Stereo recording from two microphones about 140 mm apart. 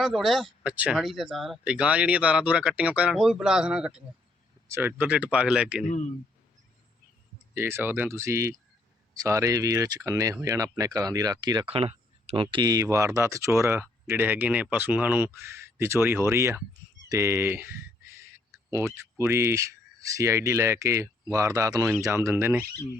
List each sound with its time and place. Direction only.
0.0 s speech: centre (ahead or behind)
7.5 s speech: 15° right (ahead or behind)
11.7 s speech: 45° right (ahead or behind); by 22.6 s 15° right (ahead or behind)